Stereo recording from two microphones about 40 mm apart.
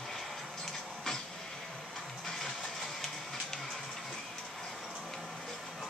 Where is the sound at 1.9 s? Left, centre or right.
Centre.